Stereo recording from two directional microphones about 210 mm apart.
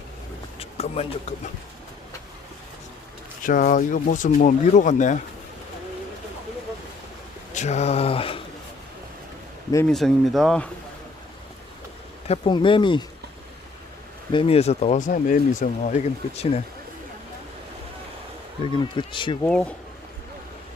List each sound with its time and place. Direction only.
0.6 s a sound: 30° left (ahead or behind)
3.4 s speech: 40° left (ahead or behind)
7.5 s mantra: 35° left (ahead or behind)
9.7 s speech: 5° left (ahead or behind)
12.3 s mantra: 25° left (ahead or behind)
14.3 s speech: 30° left (ahead or behind)
18.6 s mantra: 25° left (ahead or behind)
19.4 s speech: 5° left (ahead or behind)